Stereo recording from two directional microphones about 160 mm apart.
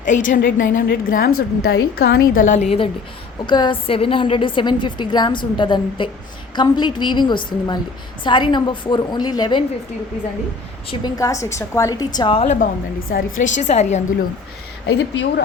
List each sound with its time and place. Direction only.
0.0 s a woman's voice: 55° left (ahead or behind); by 2.2 s 75° left (ahead or behind)
2.3 s a woman's voice: 50° left (ahead or behind); by 9.6 s 30° left (ahead or behind)
11.0 s a woman's voice: 20° left (ahead or behind)
13.1 s a woman's voice: 55° left (ahead or behind)
14.8 s speech: 90° left